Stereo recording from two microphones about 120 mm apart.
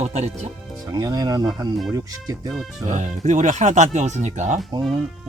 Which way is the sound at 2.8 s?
90° right.